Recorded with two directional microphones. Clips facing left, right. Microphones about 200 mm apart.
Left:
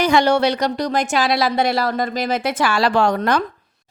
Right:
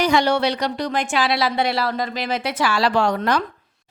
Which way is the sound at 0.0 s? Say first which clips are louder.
Left 3 dB; 50° left (ahead or behind).